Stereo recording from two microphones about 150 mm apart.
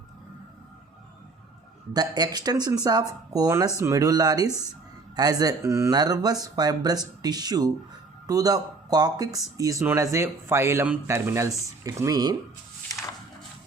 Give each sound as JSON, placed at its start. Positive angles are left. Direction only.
{"t": 1.9, "sound": "speech", "side_deg": -25}